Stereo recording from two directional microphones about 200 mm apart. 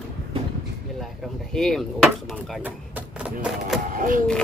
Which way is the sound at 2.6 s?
10° right (ahead or behind).